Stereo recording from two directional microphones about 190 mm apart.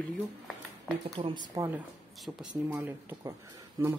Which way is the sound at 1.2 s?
30° right (ahead or behind).